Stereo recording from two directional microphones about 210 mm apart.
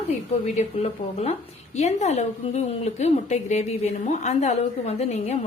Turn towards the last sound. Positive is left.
turn(degrees=30)  # may be behind; listen again after turning